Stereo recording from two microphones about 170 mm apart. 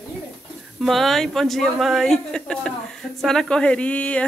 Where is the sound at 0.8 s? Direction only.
Centre (ahead or behind).